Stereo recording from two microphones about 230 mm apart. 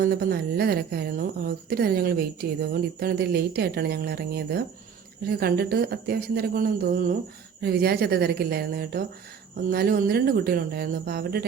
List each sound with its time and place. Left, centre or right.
0.0 s a woman's voice: right